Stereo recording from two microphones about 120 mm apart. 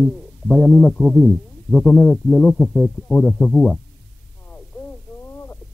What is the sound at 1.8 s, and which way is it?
Speech, 15° left (ahead or behind).